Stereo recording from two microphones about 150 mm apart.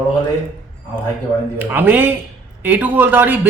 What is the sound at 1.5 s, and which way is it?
Speech, 10° right (ahead or behind).